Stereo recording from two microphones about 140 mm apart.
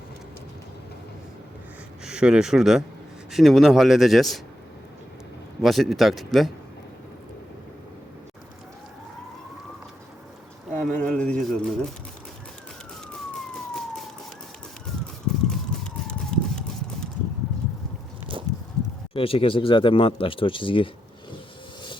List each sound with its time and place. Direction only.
2.0 s speech: 5° right (ahead or behind)
5.6 s speech: centre (ahead or behind)
10.8 s pigeon: 5° left (ahead or behind)
16.0 s horse: 5° left (ahead or behind)
19.1 s speech: 40° left (ahead or behind)